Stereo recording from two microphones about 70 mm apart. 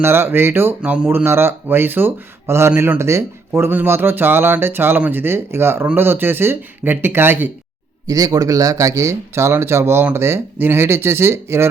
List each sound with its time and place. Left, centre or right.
0.0 s speech: right
0.8 s speech: centre; by 3.7 s right
3.7 s speech: right
8.0 s speech: right